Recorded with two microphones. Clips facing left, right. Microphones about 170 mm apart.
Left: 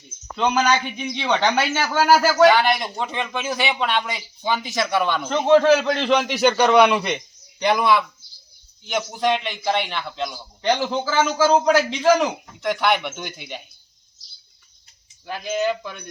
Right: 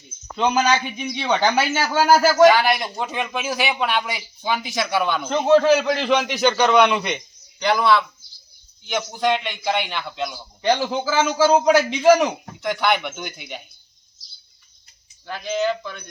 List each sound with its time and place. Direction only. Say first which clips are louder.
0.3 s a man's voice: even; 10° right (ahead or behind)
7.6 s a man's voice: even; 20° left (ahead or behind)
8.9 s a man's voice: even; centre (ahead or behind)
15.3 s a man's voice: even; 10° left (ahead or behind)